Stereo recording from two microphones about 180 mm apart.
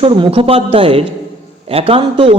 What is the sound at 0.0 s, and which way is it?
A man's voice, 30° right (ahead or behind).